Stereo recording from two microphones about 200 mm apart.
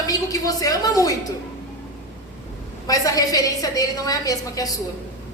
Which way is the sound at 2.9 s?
15° left (ahead or behind).